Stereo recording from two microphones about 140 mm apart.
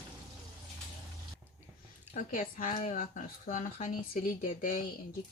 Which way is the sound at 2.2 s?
75° left (ahead or behind).